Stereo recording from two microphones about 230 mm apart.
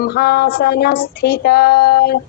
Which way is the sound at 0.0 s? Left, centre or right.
Left.